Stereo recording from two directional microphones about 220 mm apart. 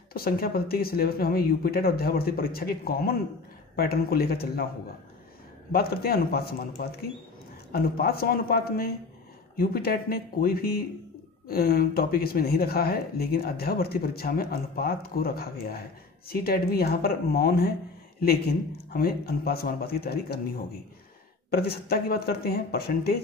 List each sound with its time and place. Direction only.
0.1 s speech: 45° left (ahead or behind)
5.7 s speech: 45° left (ahead or behind)